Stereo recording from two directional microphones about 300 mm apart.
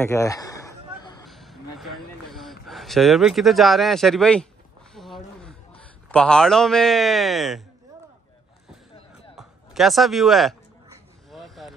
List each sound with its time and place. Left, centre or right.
0.0 s a sound: centre
6.1 s speech: centre
9.3 s music: centre
11.2 s vehicle: centre